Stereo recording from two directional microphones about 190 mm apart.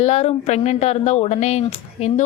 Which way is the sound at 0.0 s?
35° left (ahead or behind).